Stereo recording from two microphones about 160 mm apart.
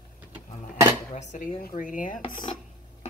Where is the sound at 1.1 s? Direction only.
55° left (ahead or behind).